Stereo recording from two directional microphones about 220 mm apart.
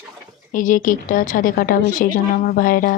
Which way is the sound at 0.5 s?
35° left (ahead or behind).